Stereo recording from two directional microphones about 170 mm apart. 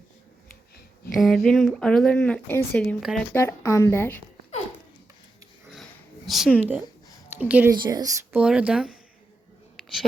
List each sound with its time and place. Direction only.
1.1 s a woman's voice: centre (ahead or behind)
5.7 s dog: centre (ahead or behind)
7.3 s speech: 10° right (ahead or behind)
7.7 s speech: 20° right (ahead or behind)
8.4 s speech: 5° right (ahead or behind)